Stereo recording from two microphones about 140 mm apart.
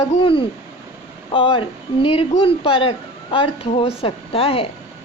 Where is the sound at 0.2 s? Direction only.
40° left (ahead or behind).